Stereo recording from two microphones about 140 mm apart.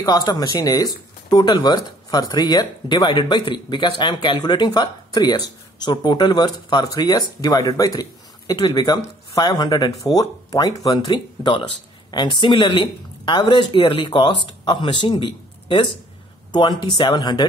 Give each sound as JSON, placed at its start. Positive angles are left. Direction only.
{"t": 0.0, "sound": "speech", "side_deg": 30}